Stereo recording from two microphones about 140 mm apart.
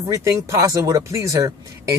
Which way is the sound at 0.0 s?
25° right (ahead or behind).